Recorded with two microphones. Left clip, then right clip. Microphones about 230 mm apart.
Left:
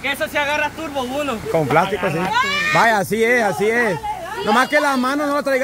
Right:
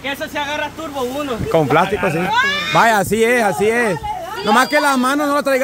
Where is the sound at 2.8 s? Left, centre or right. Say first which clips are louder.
Right 4 dB; centre.